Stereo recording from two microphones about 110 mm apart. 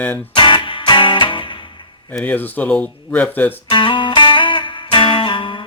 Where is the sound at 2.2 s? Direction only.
15° left (ahead or behind).